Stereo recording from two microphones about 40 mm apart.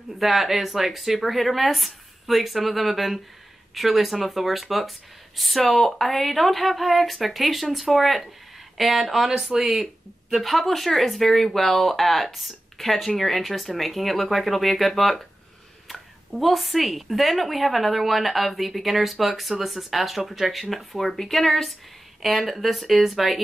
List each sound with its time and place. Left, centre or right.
0.2 s speech: centre
10.3 s speech: centre